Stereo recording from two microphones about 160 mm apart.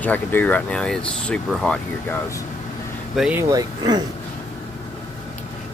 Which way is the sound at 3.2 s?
5° right (ahead or behind).